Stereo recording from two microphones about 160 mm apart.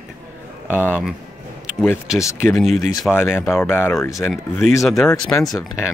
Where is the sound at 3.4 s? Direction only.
15° left (ahead or behind).